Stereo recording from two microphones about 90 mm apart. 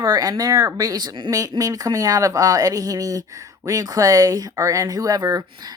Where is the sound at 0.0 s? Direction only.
45° right (ahead or behind).